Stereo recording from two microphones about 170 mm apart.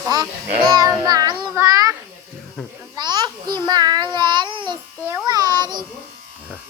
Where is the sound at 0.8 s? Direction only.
20° right (ahead or behind).